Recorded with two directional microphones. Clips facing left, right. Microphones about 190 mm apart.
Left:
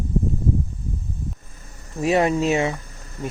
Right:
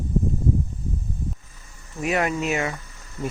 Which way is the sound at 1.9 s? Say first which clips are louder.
Left 5 dB; 30° left (ahead or behind).